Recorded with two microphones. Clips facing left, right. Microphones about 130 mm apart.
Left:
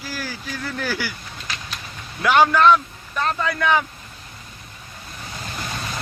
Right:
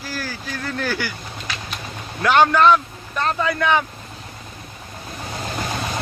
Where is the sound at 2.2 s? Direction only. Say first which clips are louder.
Right 1 dB; 5° left (ahead or behind).